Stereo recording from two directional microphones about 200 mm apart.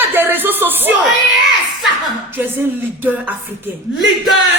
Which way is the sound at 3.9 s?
5° right (ahead or behind).